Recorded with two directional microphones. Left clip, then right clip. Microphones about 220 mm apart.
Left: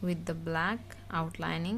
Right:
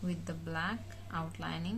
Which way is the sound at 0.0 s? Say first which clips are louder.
Left 6 dB; 40° left (ahead or behind).